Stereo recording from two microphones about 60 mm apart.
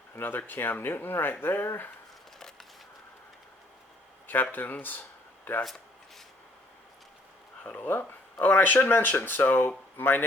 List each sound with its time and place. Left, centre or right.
0.2 s speech: left
4.5 s speech: left
7.6 s speech: left